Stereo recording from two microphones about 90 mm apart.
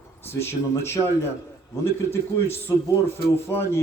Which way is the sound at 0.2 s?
25° left (ahead or behind).